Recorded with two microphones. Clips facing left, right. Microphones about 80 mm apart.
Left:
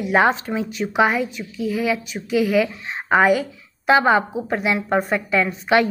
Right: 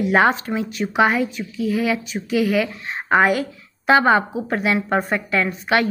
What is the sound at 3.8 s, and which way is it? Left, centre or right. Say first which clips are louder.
Speech: right 1 dB; centre.